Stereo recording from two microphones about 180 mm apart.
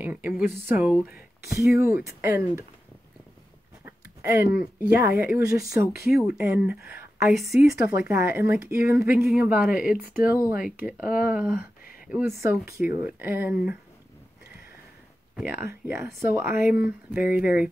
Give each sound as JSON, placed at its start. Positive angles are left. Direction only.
{"t": 0.0, "sound": "speech", "side_deg": -10}
{"t": 3.8, "sound": "a sound", "side_deg": -15}
{"t": 5.0, "sound": "speech", "side_deg": -10}
{"t": 6.1, "sound": "a woman's voice", "side_deg": -5}
{"t": 11.1, "sound": "speech", "side_deg": 50}
{"t": 12.1, "sound": "speech", "side_deg": -10}
{"t": 15.3, "sound": "speech", "side_deg": -10}